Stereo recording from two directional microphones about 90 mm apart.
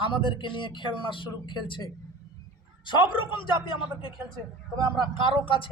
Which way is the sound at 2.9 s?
65° left (ahead or behind).